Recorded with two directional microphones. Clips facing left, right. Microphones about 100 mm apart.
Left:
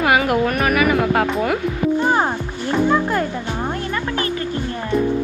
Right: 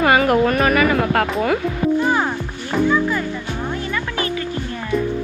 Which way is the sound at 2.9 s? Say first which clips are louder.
Left 1 dB; 55° left (ahead or behind).